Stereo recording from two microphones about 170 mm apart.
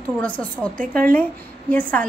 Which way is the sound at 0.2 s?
10° left (ahead or behind).